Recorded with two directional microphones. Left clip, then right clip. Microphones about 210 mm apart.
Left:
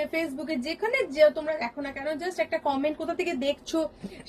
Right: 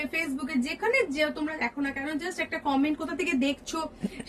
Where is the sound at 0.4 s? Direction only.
20° right (ahead or behind).